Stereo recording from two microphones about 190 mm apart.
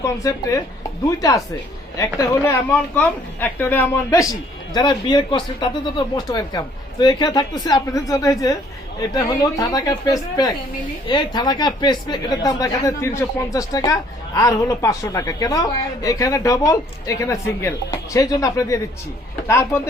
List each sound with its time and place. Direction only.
0.0 s speech: 15° left (ahead or behind)
2.1 s speech: 15° left (ahead or behind)